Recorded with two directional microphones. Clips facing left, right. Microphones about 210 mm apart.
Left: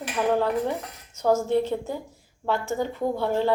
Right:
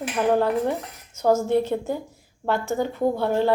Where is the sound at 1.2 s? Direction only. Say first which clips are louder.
Right 2 dB; 15° right (ahead or behind).